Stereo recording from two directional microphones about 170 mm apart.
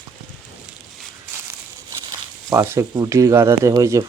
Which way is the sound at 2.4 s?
15° right (ahead or behind).